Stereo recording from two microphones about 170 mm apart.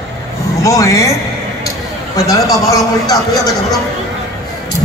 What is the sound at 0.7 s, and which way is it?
Speech, 20° left (ahead or behind).